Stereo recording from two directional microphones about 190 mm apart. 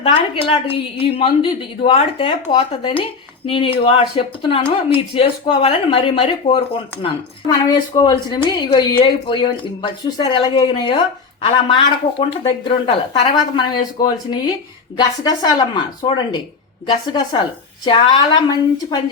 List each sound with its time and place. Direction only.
0.0 s speech: 30° left (ahead or behind)